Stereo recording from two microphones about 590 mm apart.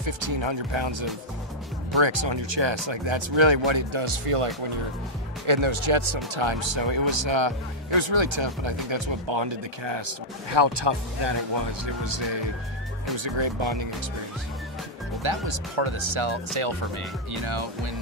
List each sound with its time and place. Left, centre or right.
0.0 s speech: right
5.5 s speech: right
15.2 s speech: right